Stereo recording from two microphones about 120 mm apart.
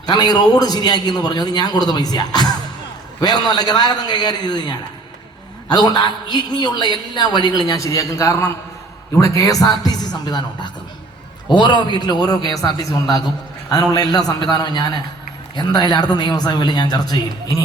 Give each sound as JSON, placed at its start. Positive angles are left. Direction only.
{"t": 0.0, "sound": "a man's voice", "side_deg": 35}